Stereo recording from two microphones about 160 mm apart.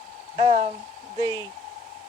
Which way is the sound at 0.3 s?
40° right (ahead or behind).